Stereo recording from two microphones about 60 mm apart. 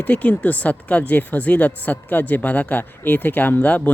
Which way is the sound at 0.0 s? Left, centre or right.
Left.